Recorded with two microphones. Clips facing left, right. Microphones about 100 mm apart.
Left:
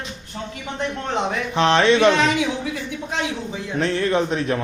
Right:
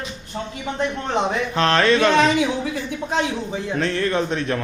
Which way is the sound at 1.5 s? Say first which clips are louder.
Left 2 dB; 20° left (ahead or behind).